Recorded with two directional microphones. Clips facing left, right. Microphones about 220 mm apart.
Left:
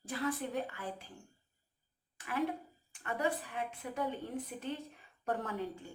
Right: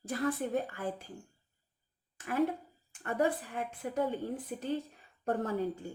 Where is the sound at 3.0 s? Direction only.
40° right (ahead or behind).